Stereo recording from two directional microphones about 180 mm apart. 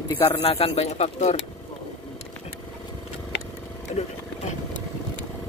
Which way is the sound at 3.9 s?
40° left (ahead or behind).